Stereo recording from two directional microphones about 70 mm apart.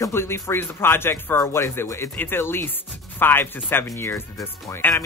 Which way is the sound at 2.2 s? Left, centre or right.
Left.